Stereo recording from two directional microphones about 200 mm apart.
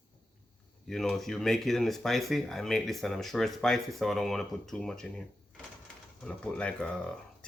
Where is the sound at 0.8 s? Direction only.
Centre (ahead or behind).